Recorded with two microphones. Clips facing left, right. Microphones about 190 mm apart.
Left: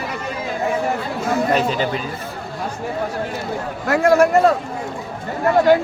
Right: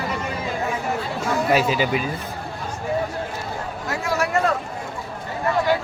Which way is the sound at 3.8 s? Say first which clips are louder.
Left 11 dB; 60° left (ahead or behind).